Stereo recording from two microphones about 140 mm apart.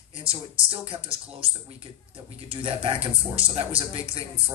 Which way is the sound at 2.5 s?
40° right (ahead or behind).